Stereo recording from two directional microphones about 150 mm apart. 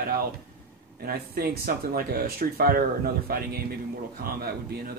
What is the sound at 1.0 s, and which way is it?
Speech, 90° right.